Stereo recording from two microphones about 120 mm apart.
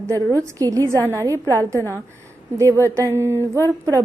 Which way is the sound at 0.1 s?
25° right (ahead or behind).